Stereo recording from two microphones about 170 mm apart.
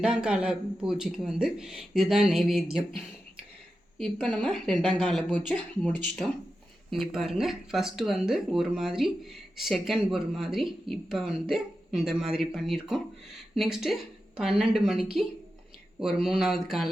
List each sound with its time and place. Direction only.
0.0 s speech: 5° right (ahead or behind)
3.9 s speech: centre (ahead or behind)